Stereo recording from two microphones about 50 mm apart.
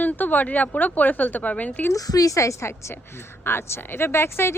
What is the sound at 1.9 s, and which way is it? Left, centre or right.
A woman's voice, left.